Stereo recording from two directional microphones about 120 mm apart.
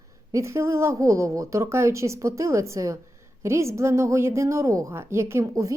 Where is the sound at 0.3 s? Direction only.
25° right (ahead or behind).